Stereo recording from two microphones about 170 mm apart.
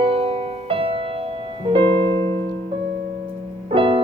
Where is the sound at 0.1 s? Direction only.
35° right (ahead or behind).